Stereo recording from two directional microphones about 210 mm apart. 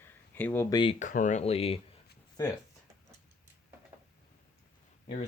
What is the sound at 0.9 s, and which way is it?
Speech, 35° left (ahead or behind).